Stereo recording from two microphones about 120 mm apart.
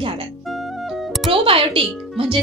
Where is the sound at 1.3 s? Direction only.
50° right (ahead or behind).